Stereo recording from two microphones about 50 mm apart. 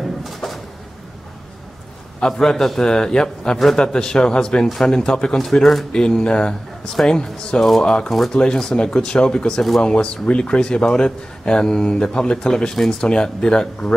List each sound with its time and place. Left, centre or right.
0.0 s a sound: centre
2.1 s a man's voice: centre
8.1 s a man's voice: centre
8.4 s speech: centre